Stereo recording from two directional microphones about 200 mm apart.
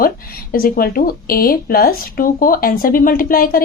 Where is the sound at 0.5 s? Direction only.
45° left (ahead or behind).